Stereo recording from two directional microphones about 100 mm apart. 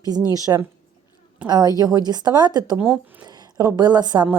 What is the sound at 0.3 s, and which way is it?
Speech, 35° right (ahead or behind).